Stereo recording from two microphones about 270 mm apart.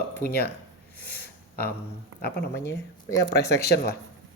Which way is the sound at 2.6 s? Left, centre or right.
Centre.